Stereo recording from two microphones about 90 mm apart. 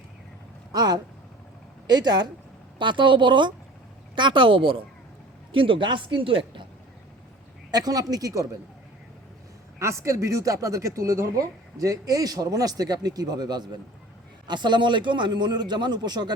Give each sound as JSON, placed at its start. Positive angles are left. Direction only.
{"t": 0.7, "sound": "speech", "side_deg": -50}
{"t": 2.7, "sound": "a man's voice", "side_deg": -60}
{"t": 7.7, "sound": "speech", "side_deg": -45}
{"t": 9.7, "sound": "a man's voice", "side_deg": -30}